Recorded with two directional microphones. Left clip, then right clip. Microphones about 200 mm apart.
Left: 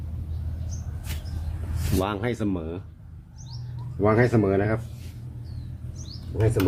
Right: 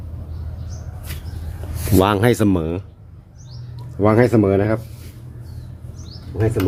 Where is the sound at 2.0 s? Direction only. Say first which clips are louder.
Right 12 dB; 55° right (ahead or behind).